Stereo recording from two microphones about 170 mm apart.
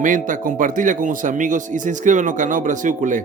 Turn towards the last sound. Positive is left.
turn(degrees=-50)  # may be behind; listen again after turning